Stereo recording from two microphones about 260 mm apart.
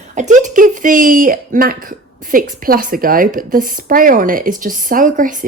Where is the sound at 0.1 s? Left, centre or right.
Right.